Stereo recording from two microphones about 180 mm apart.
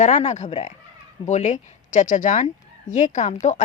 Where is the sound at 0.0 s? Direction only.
40° left (ahead or behind).